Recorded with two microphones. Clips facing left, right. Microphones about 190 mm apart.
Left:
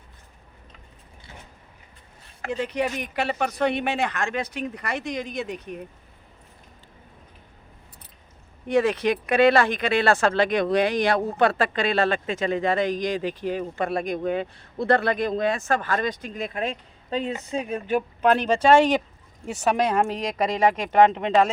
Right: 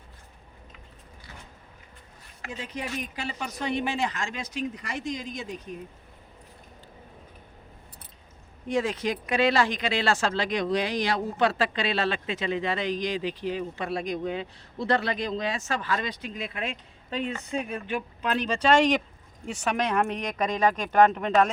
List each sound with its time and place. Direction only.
2.4 s speech: 65° left (ahead or behind)
8.6 s speech: 65° left (ahead or behind); by 17.7 s 35° left (ahead or behind)
18.2 s speech: 55° left (ahead or behind)
19.6 s a woman's voice: 30° left (ahead or behind)